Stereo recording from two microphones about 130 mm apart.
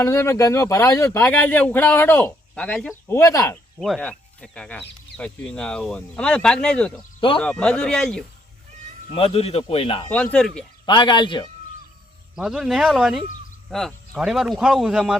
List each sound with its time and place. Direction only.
0.0 s speech: 20° left (ahead or behind)
2.6 s speech: 5° left (ahead or behind)
3.2 s speech: 25° left (ahead or behind)
3.8 s speech: centre (ahead or behind)
9.1 s a man's voice: 50° left (ahead or behind)
10.1 s speech: 10° left (ahead or behind)
10.8 s speech: 35° left (ahead or behind)
12.4 s speech: 5° right (ahead or behind)